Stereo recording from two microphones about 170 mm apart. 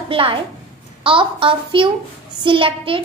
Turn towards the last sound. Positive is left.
turn(degrees=-30)  # may be behind; listen again after turning